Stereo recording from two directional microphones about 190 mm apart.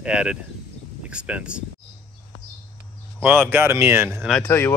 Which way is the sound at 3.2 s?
10° right (ahead or behind).